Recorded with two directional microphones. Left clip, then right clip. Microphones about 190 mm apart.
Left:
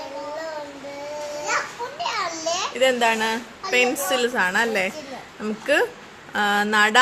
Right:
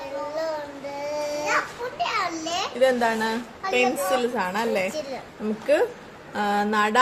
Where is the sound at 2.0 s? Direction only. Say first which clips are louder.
Even; 30° left (ahead or behind).